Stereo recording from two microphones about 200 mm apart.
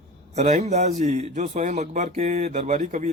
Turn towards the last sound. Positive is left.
turn(degrees=-35)  # may be behind; listen again after turning